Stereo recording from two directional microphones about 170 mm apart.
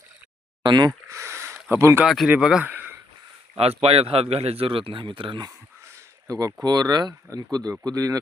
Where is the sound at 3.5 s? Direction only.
35° right (ahead or behind).